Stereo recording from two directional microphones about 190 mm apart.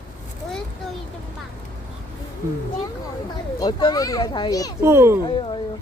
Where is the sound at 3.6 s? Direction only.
20° left (ahead or behind).